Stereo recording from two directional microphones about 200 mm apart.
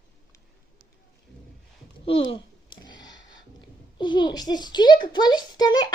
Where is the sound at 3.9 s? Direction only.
20° left (ahead or behind).